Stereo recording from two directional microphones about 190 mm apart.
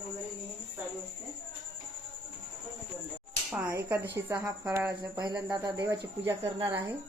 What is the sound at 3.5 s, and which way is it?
Speech, 10° right (ahead or behind).